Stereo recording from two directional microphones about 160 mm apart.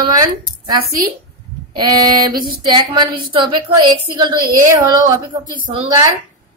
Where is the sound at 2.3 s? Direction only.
65° right (ahead or behind).